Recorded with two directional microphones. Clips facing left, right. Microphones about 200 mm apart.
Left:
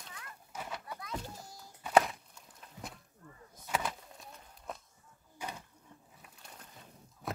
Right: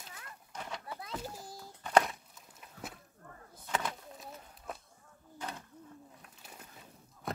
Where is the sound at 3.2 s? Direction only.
55° right (ahead or behind).